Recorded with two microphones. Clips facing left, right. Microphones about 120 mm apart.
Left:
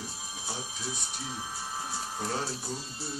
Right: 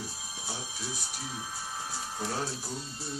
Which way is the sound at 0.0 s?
Centre (ahead or behind).